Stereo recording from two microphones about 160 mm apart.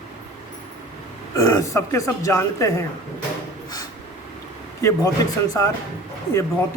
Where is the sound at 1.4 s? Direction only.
20° left (ahead or behind).